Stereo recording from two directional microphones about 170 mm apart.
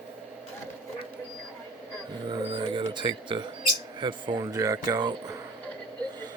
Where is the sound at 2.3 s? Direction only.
25° right (ahead or behind).